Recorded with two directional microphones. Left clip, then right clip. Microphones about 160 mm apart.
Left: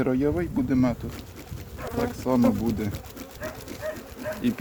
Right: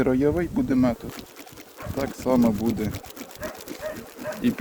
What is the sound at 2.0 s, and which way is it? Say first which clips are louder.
Speech: right 2 dB; 15° right (ahead or behind).